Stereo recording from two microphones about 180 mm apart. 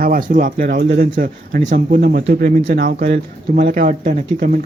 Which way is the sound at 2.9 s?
55° right (ahead or behind).